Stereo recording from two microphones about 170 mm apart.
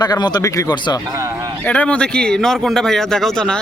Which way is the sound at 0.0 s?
25° left (ahead or behind).